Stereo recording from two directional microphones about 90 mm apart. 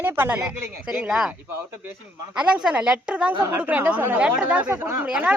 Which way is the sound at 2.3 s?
10° right (ahead or behind).